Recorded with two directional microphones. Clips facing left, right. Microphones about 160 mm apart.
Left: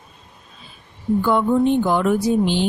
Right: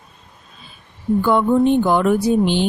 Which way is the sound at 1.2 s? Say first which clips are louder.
Right 2 dB; 60° right (ahead or behind).